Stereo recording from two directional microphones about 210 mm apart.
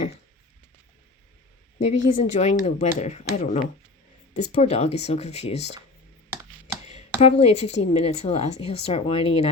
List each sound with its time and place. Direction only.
1.8 s speech: 35° left (ahead or behind)
7.2 s speech: 30° left (ahead or behind)